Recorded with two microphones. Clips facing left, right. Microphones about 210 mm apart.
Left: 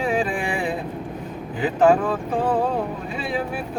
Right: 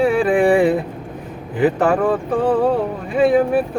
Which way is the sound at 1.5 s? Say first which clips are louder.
Right 2 dB; 60° right (ahead or behind).